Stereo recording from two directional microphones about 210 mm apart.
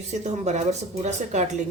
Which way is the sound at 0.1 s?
35° right (ahead or behind).